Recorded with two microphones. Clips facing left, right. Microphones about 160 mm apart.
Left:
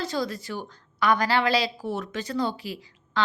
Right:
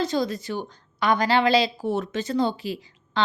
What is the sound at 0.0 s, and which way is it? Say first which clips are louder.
A woman's voice: right 4 dB; 20° right (ahead or behind).